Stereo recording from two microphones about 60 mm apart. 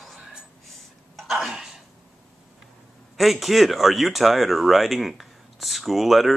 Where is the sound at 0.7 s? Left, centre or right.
Centre.